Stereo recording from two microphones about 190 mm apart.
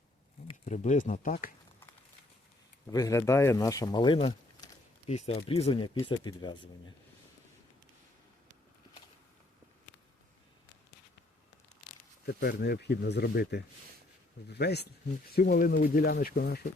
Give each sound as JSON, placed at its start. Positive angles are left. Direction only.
{"t": 0.6, "sound": "speech", "side_deg": 40}
{"t": 2.9, "sound": "speech", "side_deg": 15}
{"t": 12.2, "sound": "speech", "side_deg": 55}